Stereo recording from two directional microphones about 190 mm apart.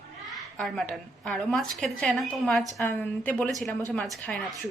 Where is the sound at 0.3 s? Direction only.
Centre (ahead or behind).